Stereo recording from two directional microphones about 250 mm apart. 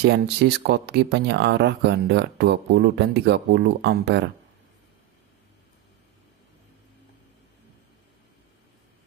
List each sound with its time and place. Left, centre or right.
0.0 s speech: right